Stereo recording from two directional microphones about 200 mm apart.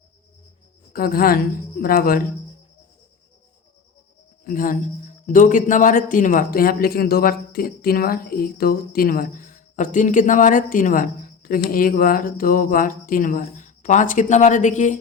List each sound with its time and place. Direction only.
0.9 s speech: 45° left (ahead or behind)
4.4 s speech: 40° left (ahead or behind)